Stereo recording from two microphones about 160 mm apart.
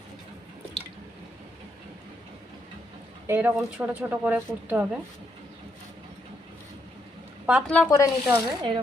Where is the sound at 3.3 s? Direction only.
15° right (ahead or behind).